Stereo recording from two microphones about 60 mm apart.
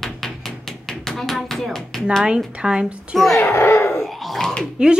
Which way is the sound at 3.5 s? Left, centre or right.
Left.